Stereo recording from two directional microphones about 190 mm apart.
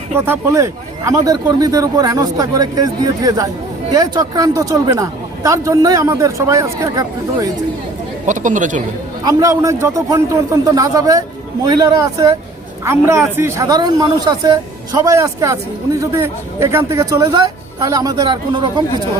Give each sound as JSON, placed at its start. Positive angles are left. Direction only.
{"t": 0.2, "sound": "speech", "side_deg": -15}
{"t": 8.3, "sound": "a man's voice", "side_deg": -40}
{"t": 9.2, "sound": "speech", "side_deg": -15}